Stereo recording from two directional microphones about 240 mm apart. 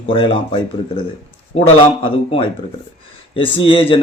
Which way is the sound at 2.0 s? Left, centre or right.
Left.